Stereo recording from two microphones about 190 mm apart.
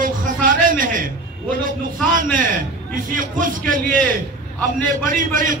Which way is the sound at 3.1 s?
45° right (ahead or behind).